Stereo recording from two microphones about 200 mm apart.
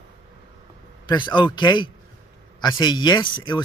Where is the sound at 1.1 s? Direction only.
25° left (ahead or behind).